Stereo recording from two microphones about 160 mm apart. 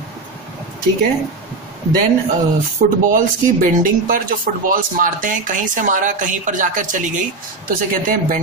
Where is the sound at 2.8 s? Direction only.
55° right (ahead or behind).